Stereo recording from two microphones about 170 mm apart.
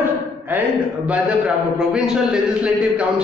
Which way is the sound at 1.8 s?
5° right (ahead or behind).